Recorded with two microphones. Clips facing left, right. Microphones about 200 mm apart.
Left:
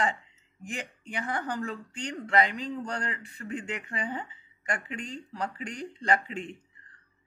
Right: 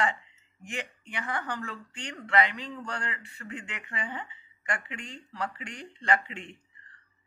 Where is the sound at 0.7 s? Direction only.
40° left (ahead or behind).